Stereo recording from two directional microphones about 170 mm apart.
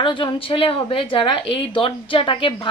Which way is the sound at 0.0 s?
30° left (ahead or behind).